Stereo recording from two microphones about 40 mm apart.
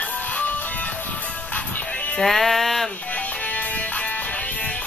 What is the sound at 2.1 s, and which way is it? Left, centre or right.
Music, centre.